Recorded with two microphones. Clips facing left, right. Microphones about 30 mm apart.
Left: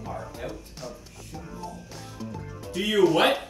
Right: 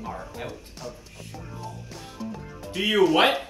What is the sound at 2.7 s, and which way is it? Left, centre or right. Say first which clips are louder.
Speech: right 1 dB; centre.